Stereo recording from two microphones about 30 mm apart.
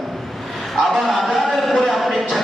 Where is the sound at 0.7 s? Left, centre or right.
Centre.